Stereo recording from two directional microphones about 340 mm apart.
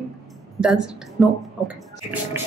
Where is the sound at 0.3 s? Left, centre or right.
Centre.